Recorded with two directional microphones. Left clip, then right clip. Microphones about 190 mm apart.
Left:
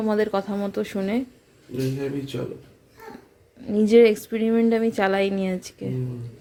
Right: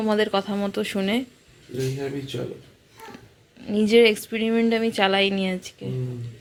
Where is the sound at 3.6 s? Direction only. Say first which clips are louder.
Left 1 dB; 15° left (ahead or behind).